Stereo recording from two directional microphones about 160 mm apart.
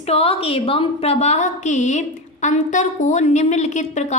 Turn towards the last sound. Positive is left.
turn(degrees=45)  # may be behind; listen again after turning